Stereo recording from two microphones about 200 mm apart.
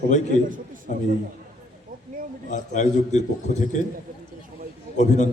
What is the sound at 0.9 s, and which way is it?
Speech, 40° left (ahead or behind).